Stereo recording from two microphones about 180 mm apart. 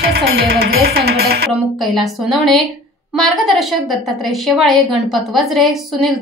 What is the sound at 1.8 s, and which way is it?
A woman's voice, centre (ahead or behind).